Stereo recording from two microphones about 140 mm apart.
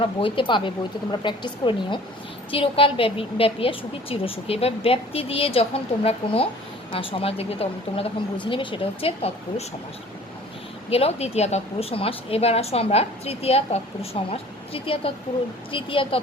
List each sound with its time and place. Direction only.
0.0 s speech: 40° left (ahead or behind)
2.5 s a woman's voice: 40° left (ahead or behind)
10.8 s a woman's voice: 45° left (ahead or behind)